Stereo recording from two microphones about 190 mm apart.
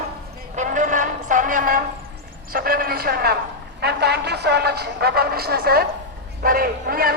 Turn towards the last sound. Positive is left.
turn(degrees=-50)  # may be behind; listen again after turning